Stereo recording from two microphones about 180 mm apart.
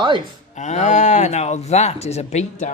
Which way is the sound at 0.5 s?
40° left (ahead or behind).